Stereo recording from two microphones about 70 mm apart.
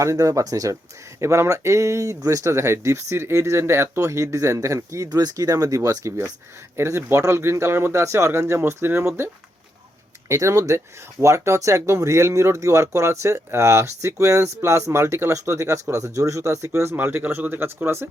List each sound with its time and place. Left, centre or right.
0.0 s speech: right
5.0 s speech: right
16.9 s speech: right